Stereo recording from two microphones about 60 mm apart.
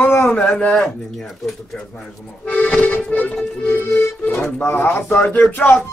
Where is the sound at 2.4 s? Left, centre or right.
Centre.